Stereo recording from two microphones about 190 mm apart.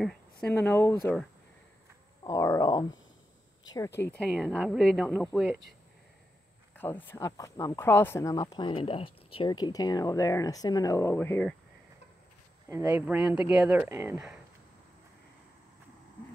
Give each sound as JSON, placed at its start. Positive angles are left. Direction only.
{"t": 0.0, "sound": "speech", "side_deg": 5}
{"t": 2.2, "sound": "speech", "side_deg": 15}
{"t": 4.0, "sound": "speech", "side_deg": 10}
{"t": 6.8, "sound": "speech", "side_deg": 10}
{"t": 12.6, "sound": "speech", "side_deg": -15}
{"t": 13.0, "sound": "speech", "side_deg": -5}